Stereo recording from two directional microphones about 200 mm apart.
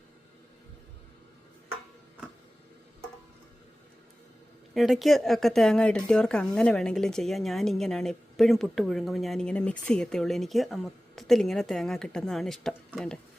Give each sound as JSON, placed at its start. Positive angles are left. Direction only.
{"t": 4.7, "sound": "speech", "side_deg": 0}